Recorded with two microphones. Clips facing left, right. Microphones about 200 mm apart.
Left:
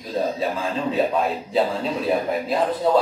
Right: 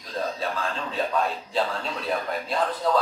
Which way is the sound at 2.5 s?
20° left (ahead or behind).